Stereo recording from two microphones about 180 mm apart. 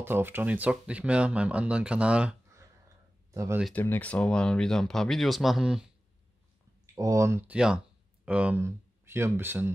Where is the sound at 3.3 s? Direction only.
15° right (ahead or behind).